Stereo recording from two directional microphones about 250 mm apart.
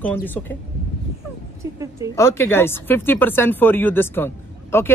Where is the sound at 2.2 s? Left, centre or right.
Centre.